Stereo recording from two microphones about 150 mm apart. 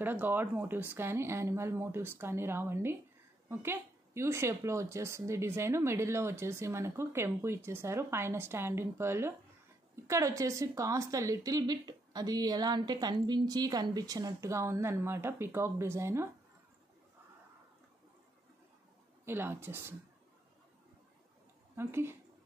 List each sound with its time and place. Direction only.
0.0 s speech: 15° right (ahead or behind)
19.2 s speech: 15° right (ahead or behind)
21.7 s speech: 15° right (ahead or behind)